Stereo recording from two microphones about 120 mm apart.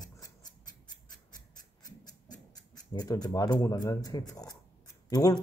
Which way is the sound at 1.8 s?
35° left (ahead or behind).